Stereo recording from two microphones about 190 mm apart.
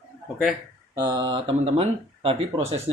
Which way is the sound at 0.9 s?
20° right (ahead or behind).